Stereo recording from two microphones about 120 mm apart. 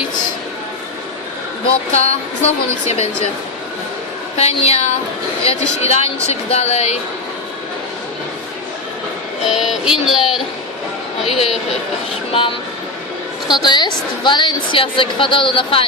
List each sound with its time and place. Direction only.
1.9 s a woman's voice: 60° left (ahead or behind)
4.4 s a woman's voice: 60° left (ahead or behind)
9.5 s a sound: 5° right (ahead or behind)
11.3 s a woman's voice: 55° left (ahead or behind)
13.5 s a woman's voice: 40° left (ahead or behind)